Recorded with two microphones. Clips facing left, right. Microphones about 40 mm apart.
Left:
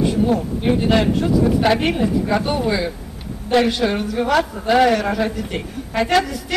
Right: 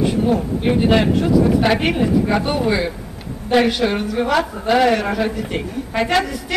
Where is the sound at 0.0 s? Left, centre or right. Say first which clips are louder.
Even; centre.